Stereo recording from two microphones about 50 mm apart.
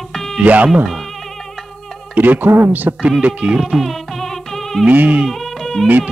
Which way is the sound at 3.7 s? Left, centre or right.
Centre.